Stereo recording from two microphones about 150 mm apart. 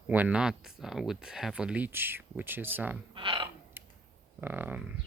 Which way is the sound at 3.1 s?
35° right (ahead or behind).